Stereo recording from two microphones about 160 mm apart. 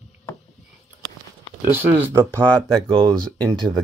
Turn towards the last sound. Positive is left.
turn(degrees=-30)  # may be behind; listen again after turning